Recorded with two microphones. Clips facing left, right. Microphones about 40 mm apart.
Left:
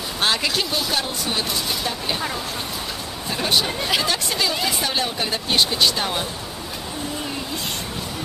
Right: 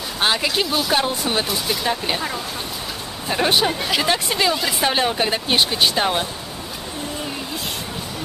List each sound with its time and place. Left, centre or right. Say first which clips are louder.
0.2 s speech: right 2 dB; centre
0.9 s speech: right 4 dB; right
1.5 s speech: right 2 dB; centre
3.3 s speech: right 4 dB; right
4.6 s speech: even; centre
4.8 s speech: right 5 dB; right